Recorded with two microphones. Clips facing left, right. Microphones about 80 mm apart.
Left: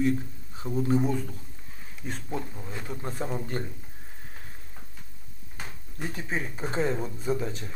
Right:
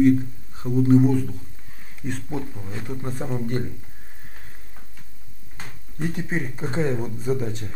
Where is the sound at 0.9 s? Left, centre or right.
Centre.